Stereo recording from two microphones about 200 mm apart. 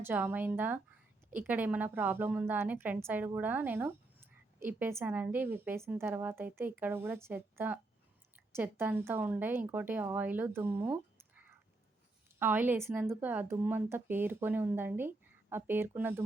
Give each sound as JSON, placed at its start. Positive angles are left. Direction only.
{"t": 0.0, "sound": "speech", "side_deg": -10}